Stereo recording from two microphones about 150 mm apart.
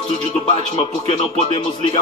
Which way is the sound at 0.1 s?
40° left (ahead or behind).